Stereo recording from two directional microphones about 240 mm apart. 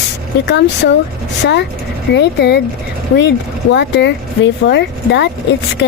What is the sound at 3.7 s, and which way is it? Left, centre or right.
Speech, left.